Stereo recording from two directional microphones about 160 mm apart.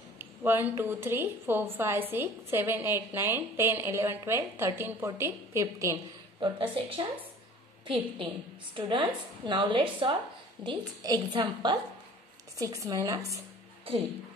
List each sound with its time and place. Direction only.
0.2 s a woman's voice: 10° right (ahead or behind)
6.4 s a woman's voice: 30° right (ahead or behind)